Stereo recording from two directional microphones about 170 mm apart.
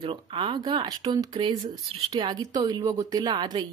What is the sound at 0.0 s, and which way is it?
Speech, 30° right (ahead or behind).